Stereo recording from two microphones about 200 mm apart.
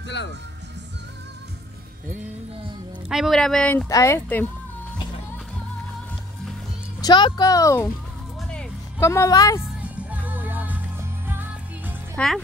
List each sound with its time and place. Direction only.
0.0 s speech: 60° left (ahead or behind)
3.1 s speech: centre (ahead or behind)
7.0 s speech: 20° left (ahead or behind)
8.4 s music: 5° left (ahead or behind)
9.8 s music: 5° right (ahead or behind)